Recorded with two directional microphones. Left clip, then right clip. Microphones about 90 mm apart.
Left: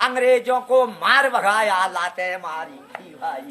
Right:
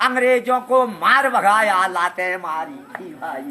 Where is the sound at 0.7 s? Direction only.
40° left (ahead or behind).